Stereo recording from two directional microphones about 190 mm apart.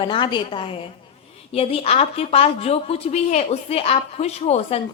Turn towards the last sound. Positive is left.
turn(degrees=30)  # may be behind; listen again after turning